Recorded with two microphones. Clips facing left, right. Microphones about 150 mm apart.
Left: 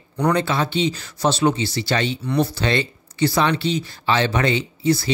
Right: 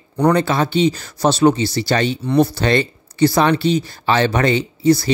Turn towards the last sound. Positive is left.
turn(degrees=-40)  # may be behind; listen again after turning